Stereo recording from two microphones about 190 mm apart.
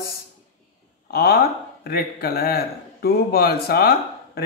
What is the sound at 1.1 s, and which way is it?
Speech, 55° left (ahead or behind).